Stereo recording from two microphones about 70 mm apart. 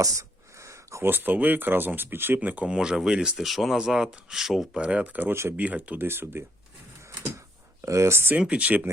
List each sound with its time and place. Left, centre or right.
0.0 s a sound: right
1.1 s speech: right
2.7 s speech: centre
3.4 s speech: centre; by 5.3 s right
5.3 s speech: right
5.5 s speech: right
6.1 s speech: right
7.2 s computer keyboard: right
8.4 s speech: centre